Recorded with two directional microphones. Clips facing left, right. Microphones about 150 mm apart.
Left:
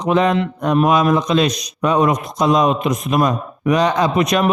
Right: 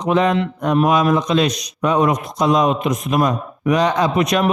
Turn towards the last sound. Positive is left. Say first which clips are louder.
# left 1 dB
turn(degrees=35)  # may be behind; listen again after turning